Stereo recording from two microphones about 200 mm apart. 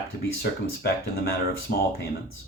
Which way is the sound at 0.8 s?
50° left (ahead or behind).